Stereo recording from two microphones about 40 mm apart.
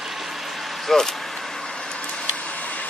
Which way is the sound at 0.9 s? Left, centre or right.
Centre.